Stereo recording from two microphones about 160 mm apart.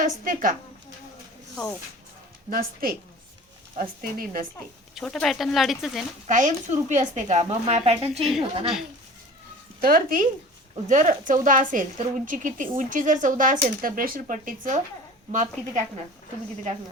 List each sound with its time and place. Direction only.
0.0 s a woman's voice: 60° right (ahead or behind)
2.5 s a woman's voice: 65° right (ahead or behind)
4.9 s speech: centre (ahead or behind)
6.2 s speech: 50° right (ahead or behind)
9.8 s a woman's voice: 65° right (ahead or behind)
10.8 s a woman's voice: 50° right (ahead or behind)